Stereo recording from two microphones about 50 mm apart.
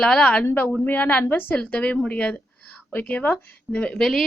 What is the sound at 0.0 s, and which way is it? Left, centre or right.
Speech, centre.